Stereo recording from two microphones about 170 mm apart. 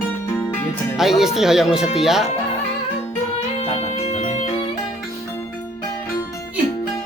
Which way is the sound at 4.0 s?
40° left (ahead or behind).